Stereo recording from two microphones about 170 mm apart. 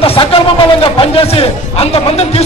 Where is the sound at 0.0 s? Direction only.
35° left (ahead or behind).